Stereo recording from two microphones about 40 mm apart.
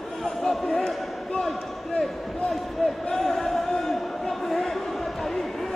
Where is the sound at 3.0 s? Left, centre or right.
Centre.